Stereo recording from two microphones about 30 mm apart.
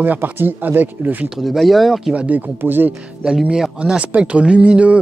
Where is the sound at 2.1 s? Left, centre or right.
Right.